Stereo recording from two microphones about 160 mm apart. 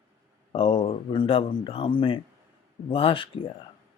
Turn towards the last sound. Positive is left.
turn(degrees=35)  # may be behind; listen again after turning